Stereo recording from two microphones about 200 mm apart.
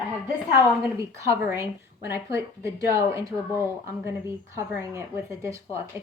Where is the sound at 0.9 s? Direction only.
15° right (ahead or behind).